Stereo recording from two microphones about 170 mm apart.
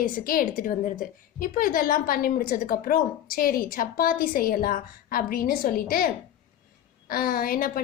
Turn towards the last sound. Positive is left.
turn(degrees=55)  # may be behind; listen again after turning